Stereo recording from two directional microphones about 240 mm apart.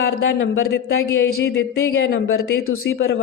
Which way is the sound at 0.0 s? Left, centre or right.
Left.